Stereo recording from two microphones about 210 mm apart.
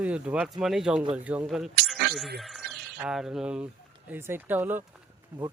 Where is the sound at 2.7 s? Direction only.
50° right (ahead or behind).